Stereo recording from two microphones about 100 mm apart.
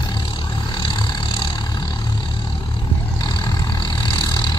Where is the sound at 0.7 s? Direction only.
50° left (ahead or behind).